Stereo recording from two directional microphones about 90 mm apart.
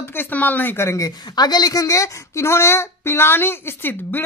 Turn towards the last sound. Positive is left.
turn(degrees=25)  # may be behind; listen again after turning